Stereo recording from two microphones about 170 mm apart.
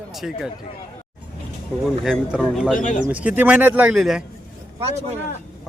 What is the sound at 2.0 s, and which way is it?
Speech, 5° right (ahead or behind).